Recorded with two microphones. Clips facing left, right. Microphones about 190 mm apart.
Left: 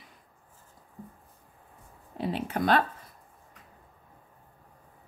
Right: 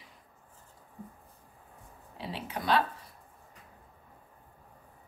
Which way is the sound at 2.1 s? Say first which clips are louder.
Left 8 dB; 50° left (ahead or behind).